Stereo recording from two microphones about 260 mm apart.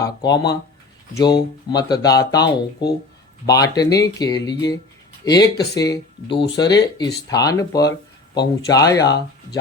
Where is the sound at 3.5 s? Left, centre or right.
Centre.